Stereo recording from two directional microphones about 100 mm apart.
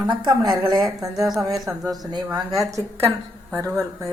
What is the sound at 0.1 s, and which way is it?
Speech, 45° right (ahead or behind).